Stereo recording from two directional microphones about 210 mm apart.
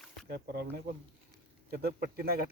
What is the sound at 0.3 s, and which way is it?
Speech, 50° right (ahead or behind).